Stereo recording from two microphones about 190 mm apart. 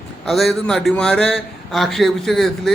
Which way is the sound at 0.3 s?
Centre (ahead or behind).